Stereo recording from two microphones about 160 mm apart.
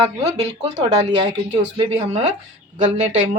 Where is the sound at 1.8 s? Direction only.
40° right (ahead or behind).